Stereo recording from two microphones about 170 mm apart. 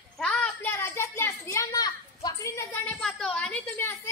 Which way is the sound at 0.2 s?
5° left (ahead or behind).